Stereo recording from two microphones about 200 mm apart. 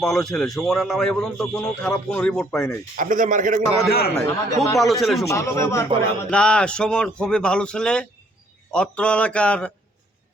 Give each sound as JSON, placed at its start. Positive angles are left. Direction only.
{"t": 0.0, "sound": "a man's voice", "side_deg": 5}
{"t": 2.9, "sound": "a man's voice", "side_deg": -40}
{"t": 3.8, "sound": "a man's voice", "side_deg": 50}
{"t": 4.4, "sound": "speech", "side_deg": 15}
{"t": 4.8, "sound": "a man's voice", "side_deg": 0}
{"t": 5.3, "sound": "a man's voice", "side_deg": 15}